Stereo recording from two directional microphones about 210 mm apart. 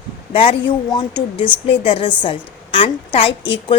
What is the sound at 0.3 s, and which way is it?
A woman's voice, 25° left (ahead or behind).